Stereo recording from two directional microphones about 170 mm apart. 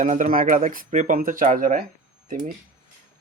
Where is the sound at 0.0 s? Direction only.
50° right (ahead or behind).